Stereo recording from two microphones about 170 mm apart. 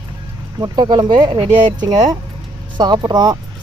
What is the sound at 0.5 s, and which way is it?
Speech, 25° right (ahead or behind).